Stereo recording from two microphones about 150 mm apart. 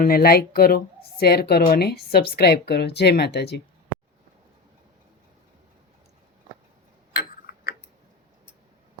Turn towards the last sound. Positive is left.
turn(degrees=75)  # may be behind; listen again after turning